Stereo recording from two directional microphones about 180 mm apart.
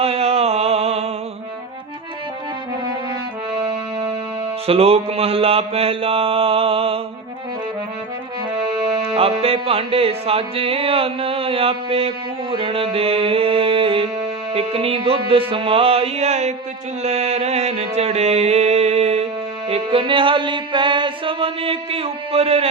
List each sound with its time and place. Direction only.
0.0 s a sound: 35° right (ahead or behind)
3.6 s music: 25° right (ahead or behind)
8.9 s music: 30° right (ahead or behind)